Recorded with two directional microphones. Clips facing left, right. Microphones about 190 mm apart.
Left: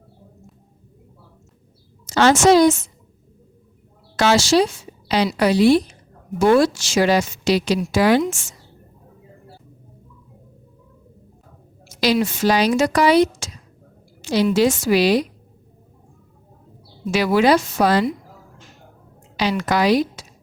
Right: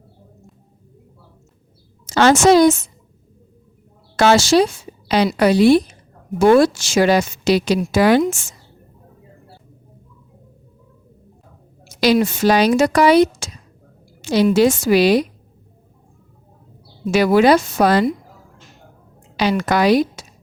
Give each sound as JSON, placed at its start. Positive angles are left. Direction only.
{"t": 2.0, "sound": "a woman's voice", "side_deg": -50}
{"t": 4.2, "sound": "a woman's voice", "side_deg": -50}
{"t": 11.9, "sound": "a woman's voice", "side_deg": -50}
{"t": 17.1, "sound": "a woman's voice", "side_deg": -50}
{"t": 19.4, "sound": "a woman's voice", "side_deg": -55}